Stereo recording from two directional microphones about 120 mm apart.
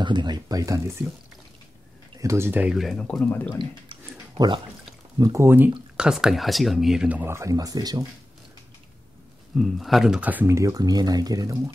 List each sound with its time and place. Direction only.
0.0 s speech: 40° right (ahead or behind); by 1.1 s 25° right (ahead or behind)
2.1 s speech: 25° right (ahead or behind)
2.6 s speech: centre (ahead or behind); by 3.5 s 15° left (ahead or behind)
3.5 s a sound: 40° right (ahead or behind)
5.2 s speech: 25° right (ahead or behind)
5.9 s speech: 5° right (ahead or behind); by 8.1 s 30° right (ahead or behind)
9.6 s speech: centre (ahead or behind); by 11.7 s 25° right (ahead or behind)